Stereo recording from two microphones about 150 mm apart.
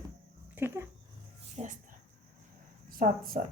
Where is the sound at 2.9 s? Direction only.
75° right (ahead or behind).